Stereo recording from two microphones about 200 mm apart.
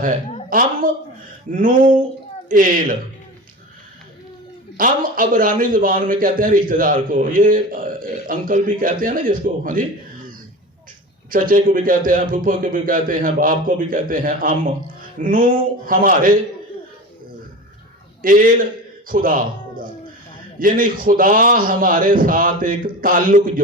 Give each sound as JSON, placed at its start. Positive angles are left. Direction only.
{"t": 0.5, "sound": "a man's voice", "side_deg": -45}
{"t": 4.8, "sound": "a man's voice", "side_deg": -45}
{"t": 11.3, "sound": "a man's voice", "side_deg": -45}
{"t": 18.2, "sound": "a man's voice", "side_deg": -45}